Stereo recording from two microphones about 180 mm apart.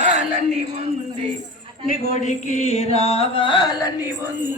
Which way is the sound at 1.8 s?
40° left (ahead or behind).